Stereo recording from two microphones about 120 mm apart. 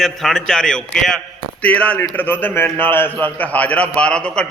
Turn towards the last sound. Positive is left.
turn(degrees=10)  # may be behind; listen again after turning